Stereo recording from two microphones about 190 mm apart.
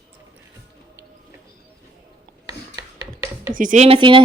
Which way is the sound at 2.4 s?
15° right (ahead or behind).